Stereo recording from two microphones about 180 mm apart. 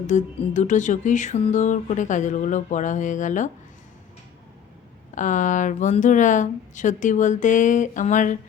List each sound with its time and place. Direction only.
0.1 s music: 45° left (ahead or behind)
5.1 s music: 45° left (ahead or behind)